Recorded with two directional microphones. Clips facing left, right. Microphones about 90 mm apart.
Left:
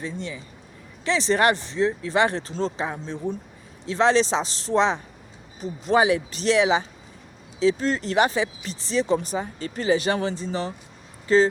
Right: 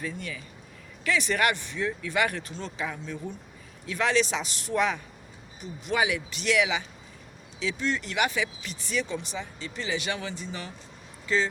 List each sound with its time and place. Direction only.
0.0 s speech: 25° left (ahead or behind)